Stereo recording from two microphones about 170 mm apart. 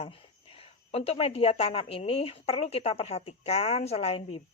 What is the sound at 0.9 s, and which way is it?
A woman's voice, 35° left (ahead or behind).